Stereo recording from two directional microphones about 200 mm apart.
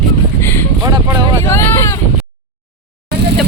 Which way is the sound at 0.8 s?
20° right (ahead or behind).